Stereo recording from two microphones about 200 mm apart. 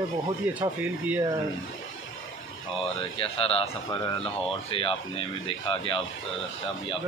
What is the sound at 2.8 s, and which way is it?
Speech, 25° left (ahead or behind).